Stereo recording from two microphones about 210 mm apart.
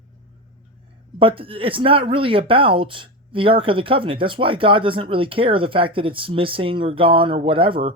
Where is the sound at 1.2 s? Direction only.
25° right (ahead or behind).